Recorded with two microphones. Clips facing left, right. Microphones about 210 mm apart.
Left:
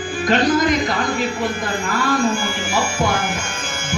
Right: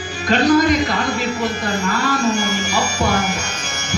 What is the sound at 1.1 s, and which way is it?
Speech, 40° right (ahead or behind).